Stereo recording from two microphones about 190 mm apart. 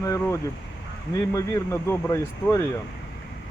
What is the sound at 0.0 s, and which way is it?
Speech, 15° left (ahead or behind).